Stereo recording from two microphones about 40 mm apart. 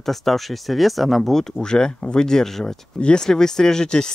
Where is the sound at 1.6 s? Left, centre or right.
Centre.